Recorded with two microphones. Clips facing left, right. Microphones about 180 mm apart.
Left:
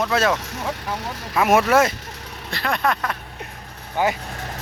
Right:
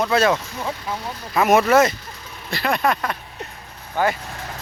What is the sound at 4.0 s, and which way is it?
Speech, 15° left (ahead or behind).